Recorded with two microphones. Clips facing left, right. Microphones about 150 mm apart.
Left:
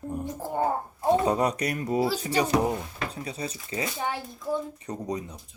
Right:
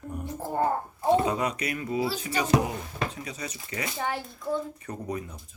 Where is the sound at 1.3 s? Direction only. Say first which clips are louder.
Left 4 dB; 35° left (ahead or behind).